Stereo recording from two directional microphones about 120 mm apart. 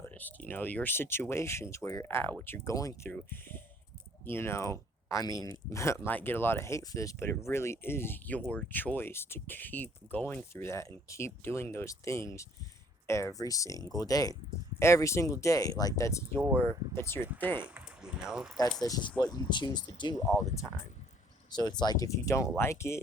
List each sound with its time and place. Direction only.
0.0 s speech: 15° left (ahead or behind)
3.1 s speech: 15° left (ahead or behind)
16.4 s speech: 20° right (ahead or behind)
16.9 s speech: 20° left (ahead or behind)
17.6 s speech: 10° right (ahead or behind)
18.8 s speech: 30° left (ahead or behind)
21.5 s speech: 35° left (ahead or behind)